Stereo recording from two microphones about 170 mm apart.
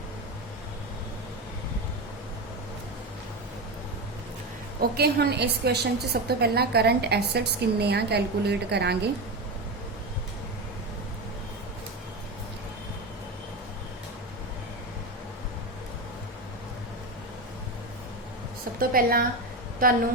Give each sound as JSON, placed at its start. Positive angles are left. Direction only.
{"t": 4.8, "sound": "a woman's voice", "side_deg": -70}
{"t": 18.8, "sound": "a woman's voice", "side_deg": -60}